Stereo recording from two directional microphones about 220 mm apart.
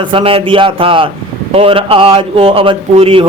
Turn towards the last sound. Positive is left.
turn(degrees=-25)  # may be behind; listen again after turning